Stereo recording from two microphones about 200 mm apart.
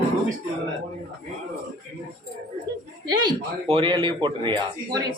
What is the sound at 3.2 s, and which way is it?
A man's voice, 25° right (ahead or behind).